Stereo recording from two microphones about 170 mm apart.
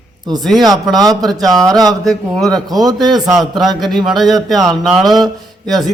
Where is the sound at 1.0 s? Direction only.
20° right (ahead or behind).